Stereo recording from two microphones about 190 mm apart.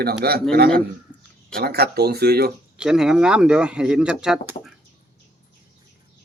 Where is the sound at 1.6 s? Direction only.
55° right (ahead or behind).